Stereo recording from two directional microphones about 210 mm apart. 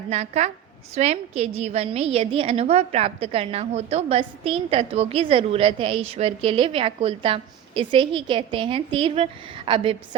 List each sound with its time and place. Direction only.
0.1 s a woman's voice: 30° right (ahead or behind)